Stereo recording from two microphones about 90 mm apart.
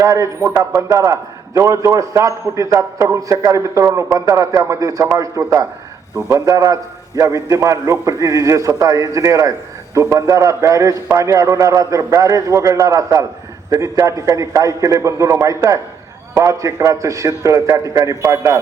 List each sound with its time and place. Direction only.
0.0 s a man's voice: 35° right (ahead or behind)